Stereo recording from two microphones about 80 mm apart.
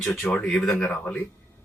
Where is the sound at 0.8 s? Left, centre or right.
Centre.